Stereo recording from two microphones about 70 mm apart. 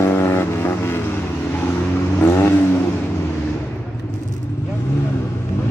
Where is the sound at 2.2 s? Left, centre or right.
Left.